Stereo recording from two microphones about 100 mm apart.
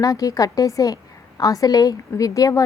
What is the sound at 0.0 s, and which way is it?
A woman's voice, 35° left (ahead or behind).